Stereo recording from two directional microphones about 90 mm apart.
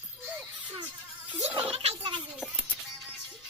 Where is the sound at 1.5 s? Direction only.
85° right.